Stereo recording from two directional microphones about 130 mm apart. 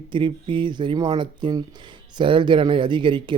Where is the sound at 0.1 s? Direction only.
40° right (ahead or behind).